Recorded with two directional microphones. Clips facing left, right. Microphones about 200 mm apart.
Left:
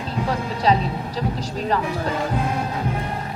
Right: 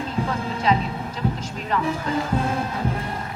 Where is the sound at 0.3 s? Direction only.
35° left (ahead or behind).